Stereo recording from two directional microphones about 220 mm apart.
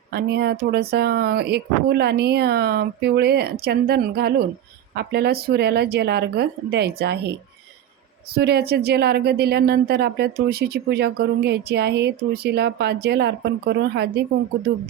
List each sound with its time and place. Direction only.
0.1 s a woman's voice: 45° right (ahead or behind)